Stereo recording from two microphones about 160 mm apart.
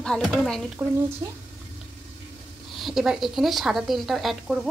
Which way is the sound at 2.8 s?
Centre (ahead or behind).